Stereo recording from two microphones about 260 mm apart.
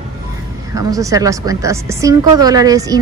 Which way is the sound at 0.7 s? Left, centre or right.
Centre.